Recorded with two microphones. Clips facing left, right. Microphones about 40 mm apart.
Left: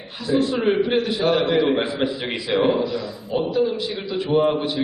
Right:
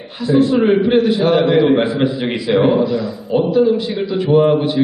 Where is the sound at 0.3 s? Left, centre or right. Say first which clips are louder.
Right 7 dB; centre.